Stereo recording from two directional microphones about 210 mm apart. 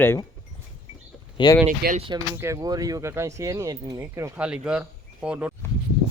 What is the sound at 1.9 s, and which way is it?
Speech, 25° right (ahead or behind).